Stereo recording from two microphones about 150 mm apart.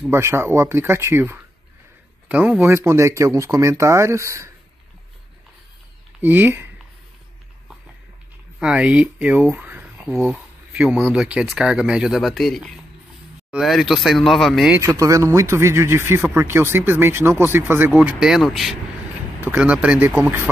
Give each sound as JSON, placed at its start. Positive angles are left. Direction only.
{"t": 0.1, "sound": "speech", "side_deg": -15}
{"t": 6.2, "sound": "speech", "side_deg": -10}
{"t": 8.5, "sound": "speech", "side_deg": -5}
{"t": 9.5, "sound": "a sound", "side_deg": -15}
{"t": 10.7, "sound": "speech", "side_deg": -10}
{"t": 14.7, "sound": "speech", "side_deg": -20}
{"t": 19.4, "sound": "speech", "side_deg": -10}